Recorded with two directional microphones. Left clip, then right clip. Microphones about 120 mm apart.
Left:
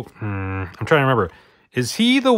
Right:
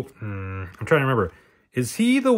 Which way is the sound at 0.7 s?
30° left (ahead or behind).